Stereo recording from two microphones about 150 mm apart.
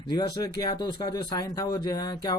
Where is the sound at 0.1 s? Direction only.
25° left (ahead or behind).